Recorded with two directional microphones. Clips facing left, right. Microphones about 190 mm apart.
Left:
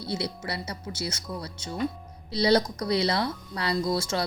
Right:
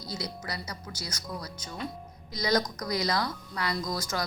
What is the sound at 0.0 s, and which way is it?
A woman's voice, 30° left (ahead or behind).